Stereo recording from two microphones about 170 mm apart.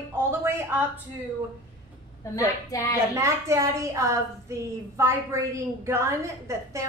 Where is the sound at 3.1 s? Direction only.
15° right (ahead or behind).